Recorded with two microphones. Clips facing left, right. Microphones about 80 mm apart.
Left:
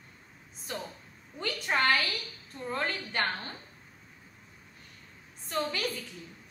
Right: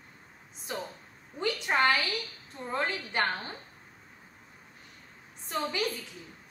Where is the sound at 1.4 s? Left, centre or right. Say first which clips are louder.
Right 2 dB; centre.